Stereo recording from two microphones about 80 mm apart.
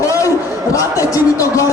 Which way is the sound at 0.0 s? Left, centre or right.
Left.